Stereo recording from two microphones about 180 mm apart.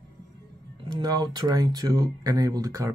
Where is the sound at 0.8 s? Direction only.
25° right (ahead or behind).